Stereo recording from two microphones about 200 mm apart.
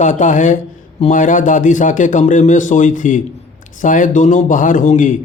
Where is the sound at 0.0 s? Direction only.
40° left (ahead or behind).